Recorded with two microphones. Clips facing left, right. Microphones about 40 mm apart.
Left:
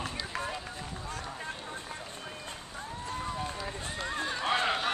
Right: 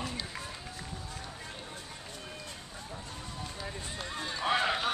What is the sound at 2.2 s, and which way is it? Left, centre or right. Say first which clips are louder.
Run: left 2 dB; left.